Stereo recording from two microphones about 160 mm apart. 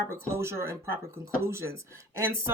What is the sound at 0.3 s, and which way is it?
Speech, 15° right (ahead or behind).